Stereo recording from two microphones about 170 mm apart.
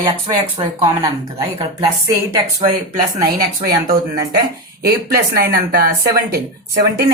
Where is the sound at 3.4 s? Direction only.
65° right (ahead or behind).